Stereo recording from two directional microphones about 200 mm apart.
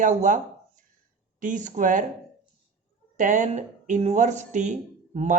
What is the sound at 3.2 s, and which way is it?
Speech, 40° right (ahead or behind).